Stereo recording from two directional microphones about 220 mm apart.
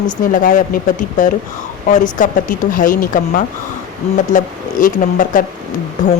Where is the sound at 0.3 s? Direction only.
35° left (ahead or behind).